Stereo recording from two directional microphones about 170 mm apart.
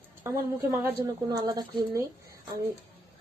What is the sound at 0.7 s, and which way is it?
Speech, 15° right (ahead or behind).